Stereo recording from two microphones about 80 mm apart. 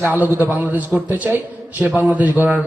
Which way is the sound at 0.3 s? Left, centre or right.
Right.